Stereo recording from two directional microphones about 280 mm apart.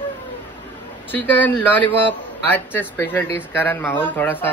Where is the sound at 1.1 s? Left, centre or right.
Centre.